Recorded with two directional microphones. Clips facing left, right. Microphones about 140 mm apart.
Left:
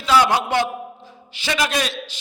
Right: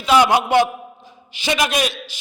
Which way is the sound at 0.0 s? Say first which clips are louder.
Right 2 dB; 15° right (ahead or behind).